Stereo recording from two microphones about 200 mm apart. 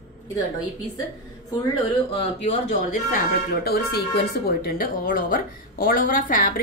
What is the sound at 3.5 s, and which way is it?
A woman's voice, 50° left (ahead or behind).